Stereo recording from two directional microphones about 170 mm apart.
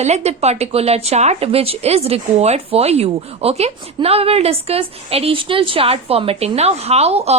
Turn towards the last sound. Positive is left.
turn(degrees=-35)  # may be behind; listen again after turning